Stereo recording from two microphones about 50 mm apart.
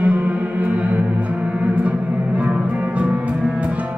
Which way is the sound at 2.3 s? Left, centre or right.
Right.